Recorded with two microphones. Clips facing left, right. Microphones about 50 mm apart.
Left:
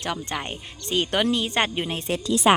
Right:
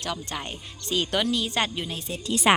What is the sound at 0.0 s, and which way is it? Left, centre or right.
Speech, left.